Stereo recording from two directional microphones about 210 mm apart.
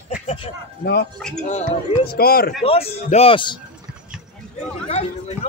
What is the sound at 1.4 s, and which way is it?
Speech, 35° left (ahead or behind).